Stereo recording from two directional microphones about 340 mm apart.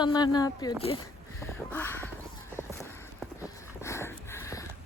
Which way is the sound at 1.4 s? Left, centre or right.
Centre.